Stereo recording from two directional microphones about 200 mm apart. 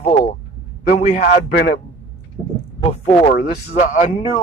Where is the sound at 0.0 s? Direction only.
40° left (ahead or behind).